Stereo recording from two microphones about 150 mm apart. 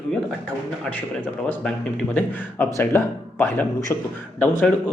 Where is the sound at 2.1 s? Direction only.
10° left (ahead or behind).